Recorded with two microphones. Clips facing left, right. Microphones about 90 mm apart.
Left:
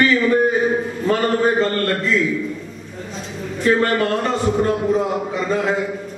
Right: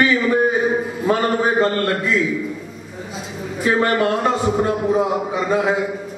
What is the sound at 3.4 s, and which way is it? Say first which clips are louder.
A man's voice: left 1 dB; 10° right (ahead or behind).